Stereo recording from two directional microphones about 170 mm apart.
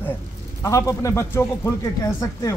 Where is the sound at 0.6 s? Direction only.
20° left (ahead or behind).